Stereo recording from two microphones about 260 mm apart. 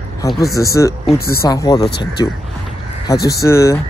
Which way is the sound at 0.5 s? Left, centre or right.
Centre.